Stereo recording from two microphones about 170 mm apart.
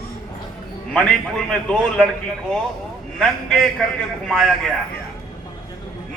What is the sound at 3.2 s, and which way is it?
A man's voice, centre (ahead or behind).